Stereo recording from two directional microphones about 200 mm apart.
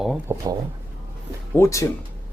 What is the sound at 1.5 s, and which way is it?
Speech, 15° left (ahead or behind).